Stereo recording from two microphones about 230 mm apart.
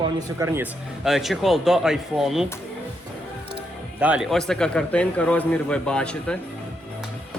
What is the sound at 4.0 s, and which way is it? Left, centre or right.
Speech, centre.